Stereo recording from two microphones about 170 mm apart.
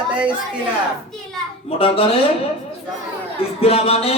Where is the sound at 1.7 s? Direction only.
35° left (ahead or behind).